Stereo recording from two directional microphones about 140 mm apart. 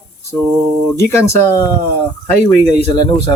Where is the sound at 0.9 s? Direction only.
20° left (ahead or behind).